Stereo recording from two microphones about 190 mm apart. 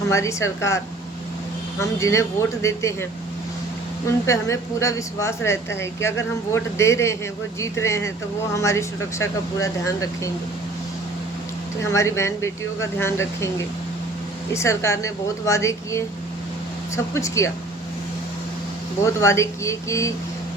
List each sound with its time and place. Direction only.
0.1 s a woman's voice: 15° left (ahead or behind)
1.8 s a woman's voice: 15° left (ahead or behind)
11.8 s a woman's voice: 15° left (ahead or behind)
14.5 s a woman's voice: 15° left (ahead or behind)
19.0 s a woman's voice: 15° left (ahead or behind)